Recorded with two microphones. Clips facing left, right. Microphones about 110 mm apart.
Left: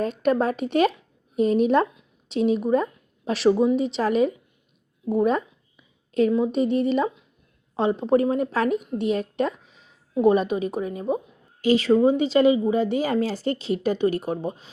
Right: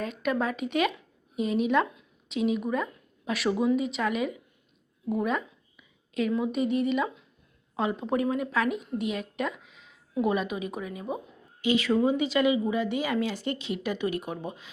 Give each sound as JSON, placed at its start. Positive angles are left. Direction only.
{"t": 0.0, "sound": "speech", "side_deg": 35}
{"t": 5.0, "sound": "a sound", "side_deg": 35}
{"t": 6.3, "sound": "speech", "side_deg": 30}